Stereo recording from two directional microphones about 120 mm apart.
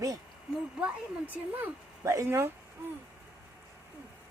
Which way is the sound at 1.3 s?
15° right (ahead or behind).